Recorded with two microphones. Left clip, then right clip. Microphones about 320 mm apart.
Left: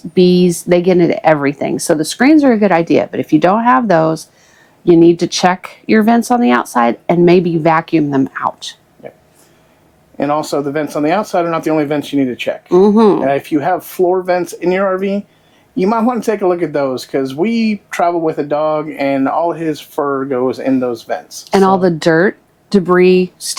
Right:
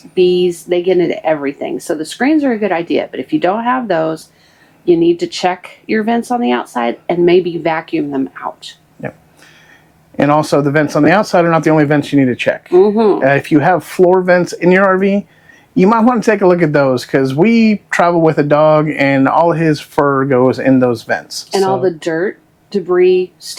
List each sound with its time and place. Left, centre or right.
0.1 s speech: left
10.2 s speech: right
12.7 s speech: centre
13.2 s speech: right
21.5 s speech: left